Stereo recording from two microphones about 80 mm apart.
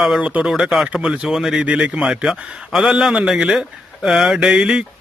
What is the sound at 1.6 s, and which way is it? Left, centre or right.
Speech, centre.